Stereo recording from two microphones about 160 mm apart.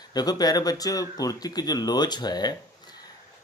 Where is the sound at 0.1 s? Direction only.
25° left (ahead or behind).